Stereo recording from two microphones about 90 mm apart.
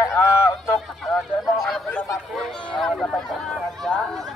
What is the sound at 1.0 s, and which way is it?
Honk, centre (ahead or behind).